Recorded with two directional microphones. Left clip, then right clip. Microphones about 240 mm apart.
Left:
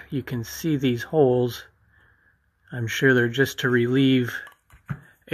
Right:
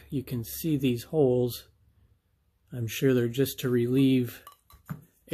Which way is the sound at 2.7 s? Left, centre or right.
Centre.